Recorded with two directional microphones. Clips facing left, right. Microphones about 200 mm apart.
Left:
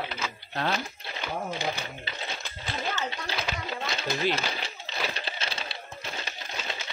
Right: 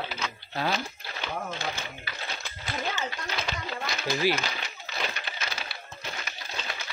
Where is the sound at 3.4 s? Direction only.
5° left (ahead or behind).